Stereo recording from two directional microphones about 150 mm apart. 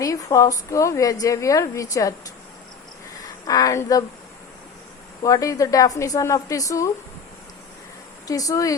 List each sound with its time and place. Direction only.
0.0 s a woman's voice: 20° left (ahead or behind)
3.4 s a woman's voice: 25° left (ahead or behind)
5.2 s a woman's voice: 20° left (ahead or behind)
8.3 s a woman's voice: 25° left (ahead or behind)